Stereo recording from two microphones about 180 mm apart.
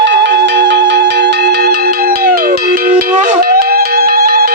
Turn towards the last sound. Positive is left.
turn(degrees=-55)  # may be behind; listen again after turning